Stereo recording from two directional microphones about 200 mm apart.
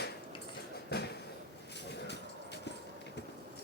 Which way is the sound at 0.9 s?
55° left (ahead or behind).